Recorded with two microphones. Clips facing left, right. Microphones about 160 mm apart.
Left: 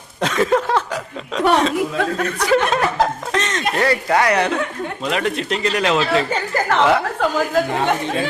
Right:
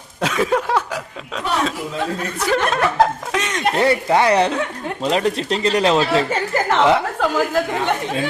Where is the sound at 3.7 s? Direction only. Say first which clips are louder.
Right 1 dB; 25° right (ahead or behind).